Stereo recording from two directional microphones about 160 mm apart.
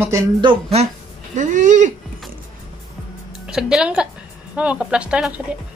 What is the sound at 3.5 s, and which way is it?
A woman's voice, 5° right (ahead or behind).